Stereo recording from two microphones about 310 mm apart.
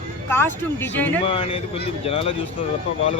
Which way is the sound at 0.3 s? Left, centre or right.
Centre.